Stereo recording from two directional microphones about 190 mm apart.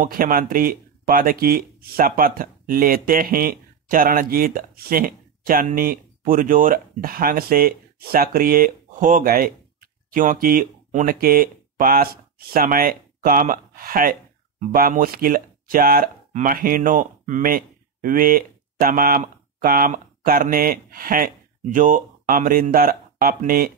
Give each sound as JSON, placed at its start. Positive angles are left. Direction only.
{"t": 0.0, "sound": "speech", "side_deg": -45}